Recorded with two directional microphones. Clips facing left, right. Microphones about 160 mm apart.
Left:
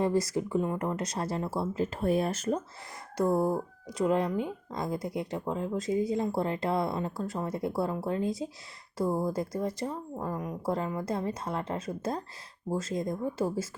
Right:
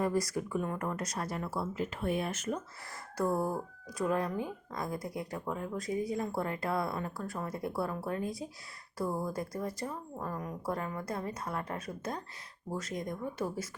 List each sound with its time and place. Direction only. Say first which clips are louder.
0.0 s speech: left 4 dB; 25° left (ahead or behind)
3.2 s speech: left 5 dB; 20° left (ahead or behind)